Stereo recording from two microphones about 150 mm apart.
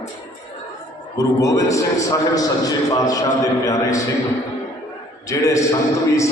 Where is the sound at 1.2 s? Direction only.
20° left (ahead or behind).